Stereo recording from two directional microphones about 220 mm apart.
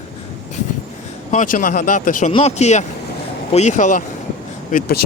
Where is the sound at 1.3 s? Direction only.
35° left (ahead or behind).